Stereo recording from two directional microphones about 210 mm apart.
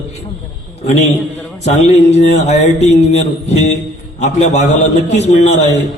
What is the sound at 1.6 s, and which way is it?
A man's voice, 30° left (ahead or behind).